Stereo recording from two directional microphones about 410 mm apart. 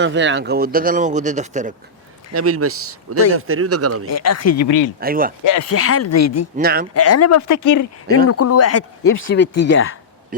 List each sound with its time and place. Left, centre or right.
0.0 s speech: right
2.3 s speech: right
4.0 s speech: left
4.9 s speech: right
5.5 s speech: left
6.6 s speech: right
6.9 s speech: left
8.3 s speech: left